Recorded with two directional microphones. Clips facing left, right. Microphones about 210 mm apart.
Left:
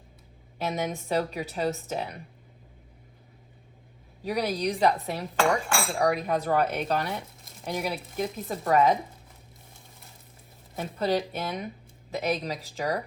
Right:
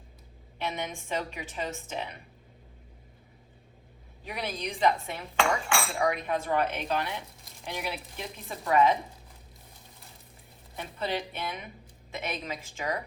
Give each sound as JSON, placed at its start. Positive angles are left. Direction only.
{"t": 0.6, "sound": "speech", "side_deg": 40}
{"t": 4.2, "sound": "speech", "side_deg": 40}
{"t": 5.4, "sound": "cutlery", "side_deg": 0}
{"t": 6.0, "sound": "speech", "side_deg": 40}
{"t": 10.8, "sound": "speech", "side_deg": 40}